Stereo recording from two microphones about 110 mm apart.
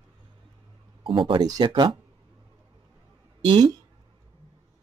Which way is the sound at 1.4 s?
40° right (ahead or behind).